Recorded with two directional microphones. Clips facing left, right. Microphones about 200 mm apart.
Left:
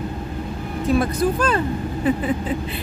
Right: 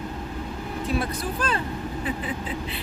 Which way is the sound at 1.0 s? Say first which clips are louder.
Left 8 dB; 45° left (ahead or behind).